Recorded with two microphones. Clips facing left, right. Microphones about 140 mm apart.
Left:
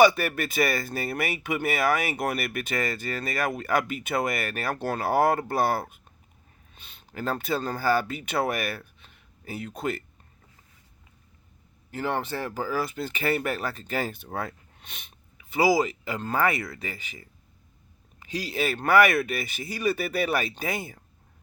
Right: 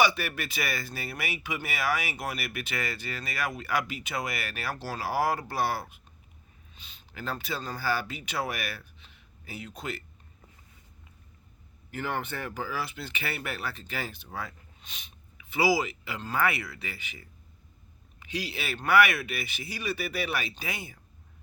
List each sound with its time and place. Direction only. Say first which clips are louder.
0.0 s speech: left 7 dB; 45° left (ahead or behind)
11.9 s speech: left 4 dB; 30° left (ahead or behind); by 15.1 s 55° left (ahead or behind)
15.4 s speech: left 4 dB; 45° left (ahead or behind)